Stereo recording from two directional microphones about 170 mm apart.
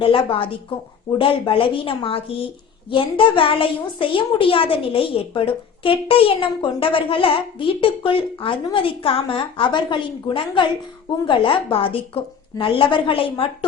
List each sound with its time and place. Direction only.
0.0 s a woman's voice: 30° left (ahead or behind)